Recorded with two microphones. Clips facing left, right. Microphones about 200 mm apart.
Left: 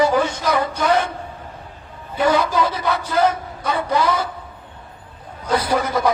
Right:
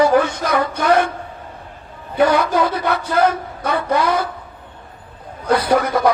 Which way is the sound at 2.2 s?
60° right (ahead or behind).